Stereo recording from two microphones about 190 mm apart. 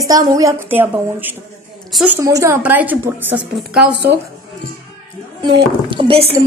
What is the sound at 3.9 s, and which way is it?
Speech, 60° right (ahead or behind).